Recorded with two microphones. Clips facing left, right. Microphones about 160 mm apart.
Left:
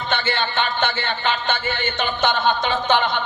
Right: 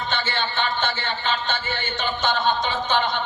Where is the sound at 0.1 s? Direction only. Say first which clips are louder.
Left 7 dB; 60° left (ahead or behind).